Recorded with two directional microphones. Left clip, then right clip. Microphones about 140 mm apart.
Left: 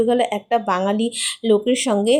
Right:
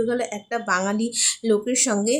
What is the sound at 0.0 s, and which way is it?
Speech, 15° left (ahead or behind).